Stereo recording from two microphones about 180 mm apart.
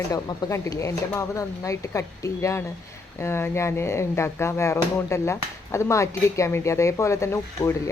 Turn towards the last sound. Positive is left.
turn(degrees=15)  # may be behind; listen again after turning